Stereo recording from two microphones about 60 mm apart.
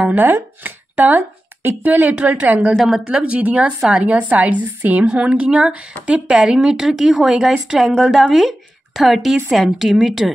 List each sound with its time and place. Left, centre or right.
0.0 s speech: right
2.7 s a woman's voice: centre
3.1 s a woman's voice: centre